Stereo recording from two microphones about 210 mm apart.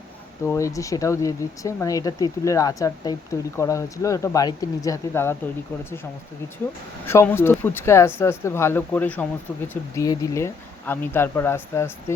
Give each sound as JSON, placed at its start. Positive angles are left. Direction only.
{"t": 0.4, "sound": "speech", "side_deg": 15}
{"t": 7.0, "sound": "speech", "side_deg": 10}